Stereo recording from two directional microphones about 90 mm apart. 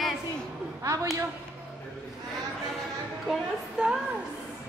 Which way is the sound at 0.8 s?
35° right (ahead or behind).